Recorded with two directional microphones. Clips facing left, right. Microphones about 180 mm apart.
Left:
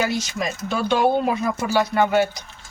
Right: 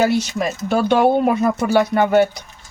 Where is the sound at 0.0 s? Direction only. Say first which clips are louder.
Right 6 dB; 60° right (ahead or behind).